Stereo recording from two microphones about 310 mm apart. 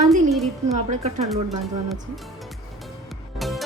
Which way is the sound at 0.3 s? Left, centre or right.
Centre.